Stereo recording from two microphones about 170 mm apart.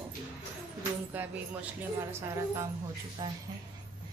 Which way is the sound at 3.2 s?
25° right (ahead or behind).